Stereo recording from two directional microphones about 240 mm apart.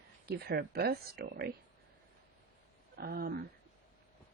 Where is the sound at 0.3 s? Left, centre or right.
Right.